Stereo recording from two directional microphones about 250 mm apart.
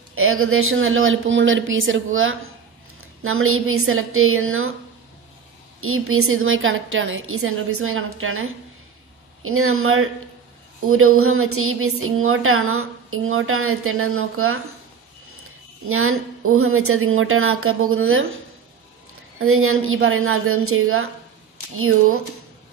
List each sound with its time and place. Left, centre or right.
0.1 s speech: right
5.8 s speech: right
15.9 s speech: right